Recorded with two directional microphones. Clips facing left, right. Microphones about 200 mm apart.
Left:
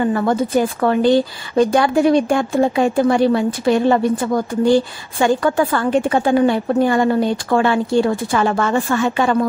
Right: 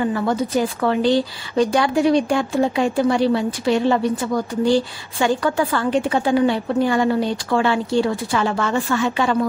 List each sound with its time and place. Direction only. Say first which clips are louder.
0.1 s a woman's voice: left 3 dB; 50° left (ahead or behind)